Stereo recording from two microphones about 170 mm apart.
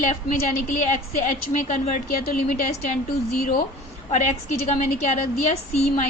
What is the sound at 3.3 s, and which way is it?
Speech, 60° left (ahead or behind).